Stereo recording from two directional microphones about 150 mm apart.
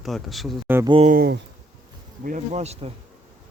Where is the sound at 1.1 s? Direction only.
85° right.